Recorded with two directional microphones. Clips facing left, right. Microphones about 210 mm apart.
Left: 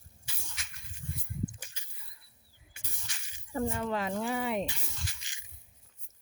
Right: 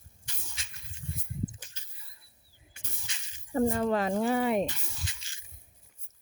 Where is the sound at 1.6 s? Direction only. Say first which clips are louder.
Left 2 dB; 10° left (ahead or behind).